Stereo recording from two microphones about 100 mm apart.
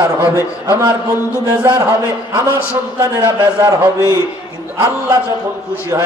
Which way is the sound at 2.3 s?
30° right (ahead or behind).